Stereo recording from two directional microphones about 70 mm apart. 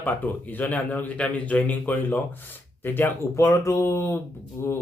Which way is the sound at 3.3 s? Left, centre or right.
Left.